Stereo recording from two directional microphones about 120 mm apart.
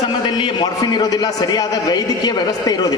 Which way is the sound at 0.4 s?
40° left (ahead or behind).